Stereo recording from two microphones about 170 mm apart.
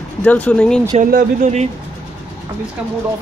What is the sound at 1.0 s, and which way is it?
Speech, 50° right (ahead or behind).